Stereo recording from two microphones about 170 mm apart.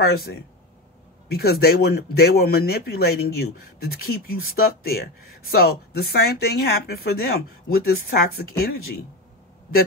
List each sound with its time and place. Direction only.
0.0 s speech: 60° left (ahead or behind)
1.3 s speech: 70° left (ahead or behind)